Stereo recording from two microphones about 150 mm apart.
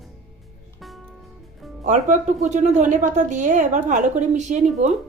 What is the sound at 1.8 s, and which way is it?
A woman's voice, 55° right (ahead or behind).